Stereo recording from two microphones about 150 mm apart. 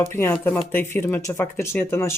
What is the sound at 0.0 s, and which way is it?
Speech, 20° left (ahead or behind).